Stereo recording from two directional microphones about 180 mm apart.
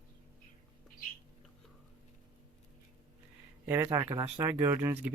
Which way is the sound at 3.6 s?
15° right (ahead or behind).